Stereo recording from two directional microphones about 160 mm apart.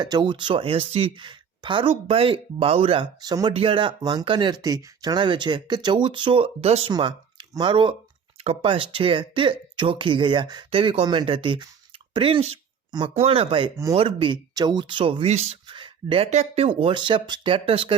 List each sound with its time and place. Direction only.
0.0 s speech: 30° right (ahead or behind)
3.5 s speech: 35° right (ahead or behind)
6.9 s speech: 30° right (ahead or behind)
15.6 s speech: 30° right (ahead or behind)